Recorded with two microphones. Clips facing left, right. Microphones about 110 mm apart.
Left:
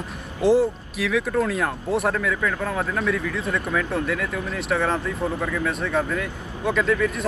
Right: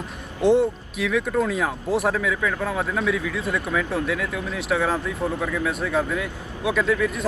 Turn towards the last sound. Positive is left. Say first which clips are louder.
# even
turn(degrees=0)  # may be behind; listen again after turning